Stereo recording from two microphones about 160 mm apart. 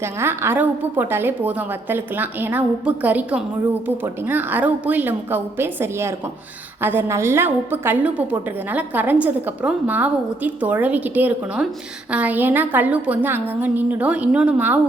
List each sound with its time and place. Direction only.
0.0 s a woman's voice: 15° right (ahead or behind)